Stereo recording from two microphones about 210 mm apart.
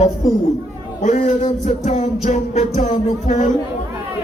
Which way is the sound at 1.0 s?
35° left (ahead or behind).